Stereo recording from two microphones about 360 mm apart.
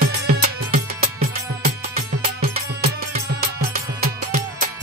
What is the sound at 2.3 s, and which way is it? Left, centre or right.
Music, right.